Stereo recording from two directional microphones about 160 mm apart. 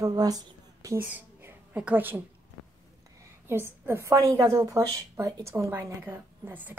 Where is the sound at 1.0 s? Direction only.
10° right (ahead or behind).